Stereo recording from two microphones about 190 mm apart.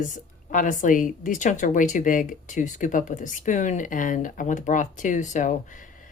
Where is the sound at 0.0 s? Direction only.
45° left (ahead or behind).